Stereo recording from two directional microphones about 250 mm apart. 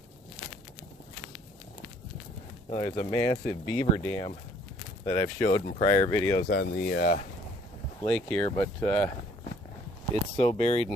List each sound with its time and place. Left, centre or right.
2.6 s speech: left
3.1 s speech: centre
6.5 s speech: left
8.0 s speech: centre
8.4 s speech: centre
10.3 s speech: left